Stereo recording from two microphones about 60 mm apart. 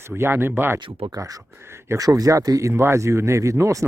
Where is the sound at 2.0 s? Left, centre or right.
Right.